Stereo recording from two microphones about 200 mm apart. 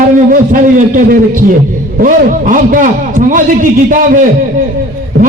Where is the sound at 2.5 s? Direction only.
40° right (ahead or behind).